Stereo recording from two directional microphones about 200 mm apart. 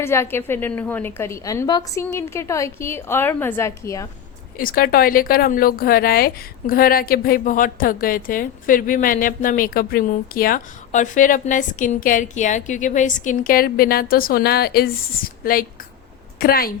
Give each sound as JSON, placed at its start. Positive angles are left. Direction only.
{"t": 0.0, "sound": "a woman's voice", "side_deg": 10}
{"t": 4.5, "sound": "a woman's voice", "side_deg": 45}